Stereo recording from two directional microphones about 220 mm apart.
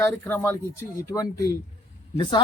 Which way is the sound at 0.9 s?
15° left (ahead or behind).